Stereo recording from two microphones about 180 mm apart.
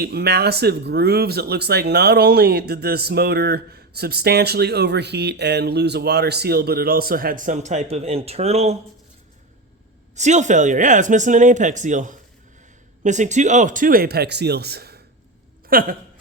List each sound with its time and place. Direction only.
0.0 s speech: 65° right (ahead or behind); by 8.7 s 35° right (ahead or behind)
10.2 s speech: 40° right (ahead or behind)